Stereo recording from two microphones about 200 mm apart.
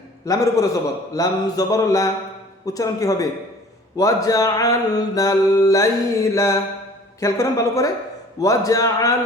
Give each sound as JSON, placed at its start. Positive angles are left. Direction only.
{"t": 0.3, "sound": "mantra", "side_deg": 15}